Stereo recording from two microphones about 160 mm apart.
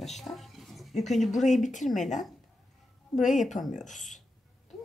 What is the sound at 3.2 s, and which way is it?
Speech, 50° left (ahead or behind).